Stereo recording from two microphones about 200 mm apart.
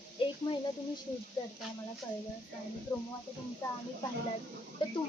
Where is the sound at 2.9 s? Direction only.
15° left (ahead or behind).